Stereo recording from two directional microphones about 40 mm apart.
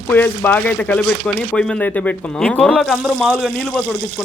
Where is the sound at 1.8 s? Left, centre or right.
Left.